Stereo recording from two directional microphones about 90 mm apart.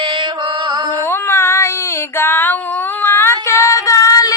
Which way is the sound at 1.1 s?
30° left (ahead or behind).